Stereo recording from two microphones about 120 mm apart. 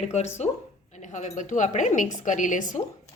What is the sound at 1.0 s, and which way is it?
Speech, 85° left.